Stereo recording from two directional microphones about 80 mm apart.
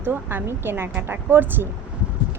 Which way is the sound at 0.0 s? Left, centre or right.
Right.